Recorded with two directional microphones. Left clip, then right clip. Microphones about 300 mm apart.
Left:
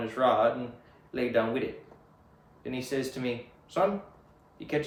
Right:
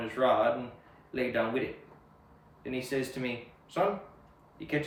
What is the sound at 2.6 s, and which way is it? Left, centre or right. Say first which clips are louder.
Speech: left 1 dB; centre.